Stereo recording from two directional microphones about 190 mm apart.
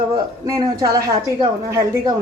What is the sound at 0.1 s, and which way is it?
A woman's voice, 20° right (ahead or behind).